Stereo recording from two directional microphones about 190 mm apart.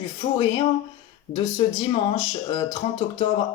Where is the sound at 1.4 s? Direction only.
25° left (ahead or behind).